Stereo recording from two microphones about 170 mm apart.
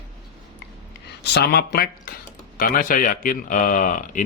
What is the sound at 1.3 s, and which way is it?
Speech, 70° left (ahead or behind).